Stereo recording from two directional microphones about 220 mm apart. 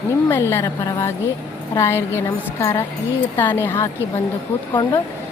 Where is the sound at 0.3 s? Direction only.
10° left (ahead or behind).